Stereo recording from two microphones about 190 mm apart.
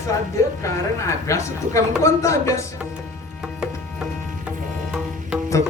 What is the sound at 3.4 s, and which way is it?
Music, 5° right (ahead or behind).